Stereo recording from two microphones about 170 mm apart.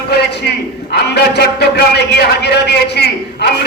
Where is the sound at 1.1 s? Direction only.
80° left.